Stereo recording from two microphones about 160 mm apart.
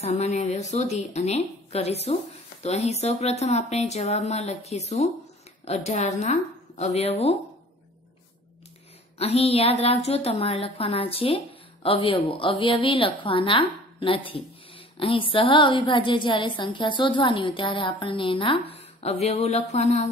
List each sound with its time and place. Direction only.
0.0 s speech: 45° left (ahead or behind)
9.2 s a woman's voice: 40° left (ahead or behind)